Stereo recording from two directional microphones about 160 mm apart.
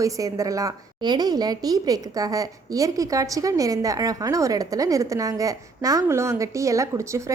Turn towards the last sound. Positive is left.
turn(degrees=-20)  # may be behind; listen again after turning